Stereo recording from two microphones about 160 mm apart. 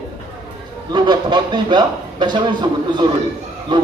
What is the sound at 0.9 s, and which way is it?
Speech, 25° right (ahead or behind).